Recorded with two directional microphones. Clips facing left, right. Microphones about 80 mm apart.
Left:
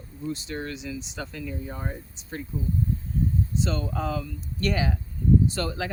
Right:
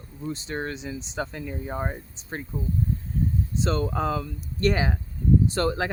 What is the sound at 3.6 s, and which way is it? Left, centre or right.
Speech, right.